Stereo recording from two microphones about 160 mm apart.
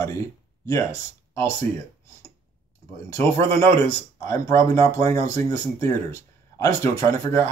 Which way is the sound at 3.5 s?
20° left (ahead or behind).